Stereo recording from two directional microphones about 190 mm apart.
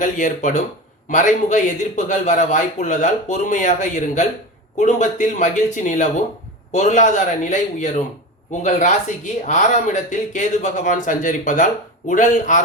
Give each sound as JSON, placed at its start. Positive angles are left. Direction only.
{"t": 0.0, "sound": "speech", "side_deg": 45}